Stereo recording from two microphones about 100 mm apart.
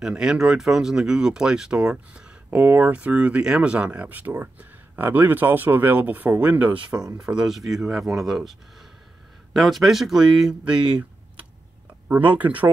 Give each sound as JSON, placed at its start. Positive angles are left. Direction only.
{"t": 0.0, "sound": "speech", "side_deg": -5}
{"t": 2.5, "sound": "speech", "side_deg": -20}
{"t": 12.1, "sound": "speech", "side_deg": -15}